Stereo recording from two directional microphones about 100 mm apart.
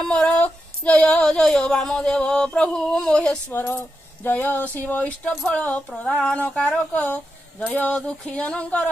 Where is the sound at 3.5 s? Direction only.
20° left (ahead or behind).